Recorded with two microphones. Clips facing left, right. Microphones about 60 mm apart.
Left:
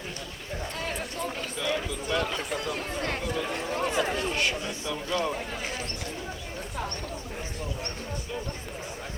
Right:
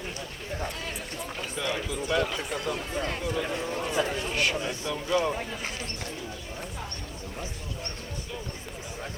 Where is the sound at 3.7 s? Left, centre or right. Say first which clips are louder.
Left 2 dB; left.